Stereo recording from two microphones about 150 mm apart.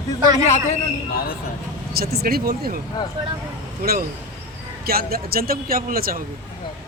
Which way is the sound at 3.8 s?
75° right (ahead or behind).